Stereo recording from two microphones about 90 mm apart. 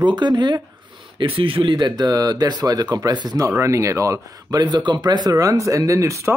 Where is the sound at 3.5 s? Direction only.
35° right (ahead or behind).